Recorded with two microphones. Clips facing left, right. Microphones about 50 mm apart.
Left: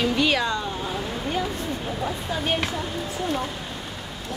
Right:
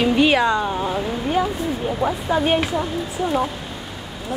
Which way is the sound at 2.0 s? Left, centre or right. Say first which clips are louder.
Right 8 dB; right.